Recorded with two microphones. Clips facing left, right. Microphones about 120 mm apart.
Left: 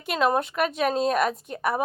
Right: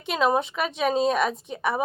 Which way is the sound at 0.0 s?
Centre (ahead or behind).